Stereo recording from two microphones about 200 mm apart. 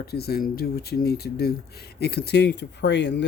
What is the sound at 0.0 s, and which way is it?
Speech, 50° left (ahead or behind).